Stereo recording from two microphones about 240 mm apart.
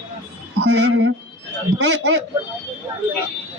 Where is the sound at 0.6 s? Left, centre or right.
Right.